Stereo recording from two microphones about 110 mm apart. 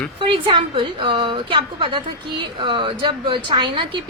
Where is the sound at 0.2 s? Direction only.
50° right (ahead or behind).